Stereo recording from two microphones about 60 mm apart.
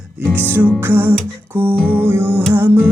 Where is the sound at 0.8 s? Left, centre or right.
Right.